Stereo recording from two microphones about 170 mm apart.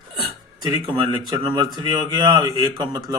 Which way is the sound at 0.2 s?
30° right (ahead or behind).